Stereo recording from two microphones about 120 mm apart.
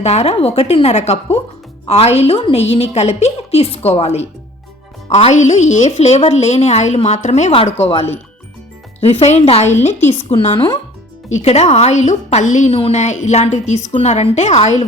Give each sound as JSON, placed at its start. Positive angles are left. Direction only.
{"t": 0.0, "sound": "a woman's voice", "side_deg": 65}
{"t": 7.5, "sound": "a woman's voice", "side_deg": 50}
{"t": 10.1, "sound": "a woman's voice", "side_deg": 50}
{"t": 11.3, "sound": "speech", "side_deg": 65}
{"t": 12.7, "sound": "speech", "side_deg": 60}